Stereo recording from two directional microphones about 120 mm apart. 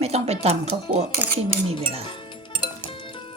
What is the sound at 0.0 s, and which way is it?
Speech, 60° right (ahead or behind).